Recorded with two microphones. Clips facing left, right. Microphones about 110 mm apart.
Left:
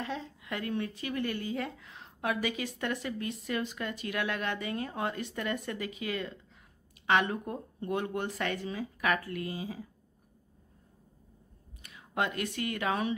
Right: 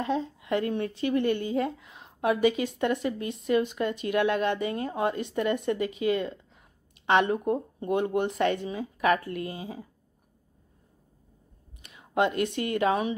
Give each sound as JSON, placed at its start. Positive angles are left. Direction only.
{"t": 0.0, "sound": "speech", "side_deg": -25}
{"t": 11.8, "sound": "speech", "side_deg": -20}